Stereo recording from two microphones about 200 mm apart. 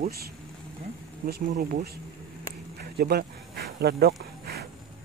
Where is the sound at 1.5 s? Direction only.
45° right (ahead or behind).